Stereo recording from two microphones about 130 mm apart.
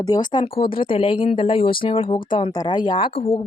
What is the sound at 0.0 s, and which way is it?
Speech, 30° left (ahead or behind).